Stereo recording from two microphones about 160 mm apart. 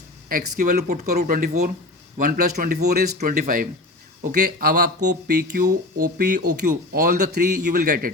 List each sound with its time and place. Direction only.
0.3 s a man's voice: 65° right (ahead or behind)